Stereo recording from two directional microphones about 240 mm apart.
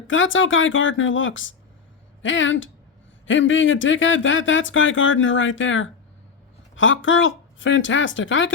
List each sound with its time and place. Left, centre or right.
0.1 s speech: left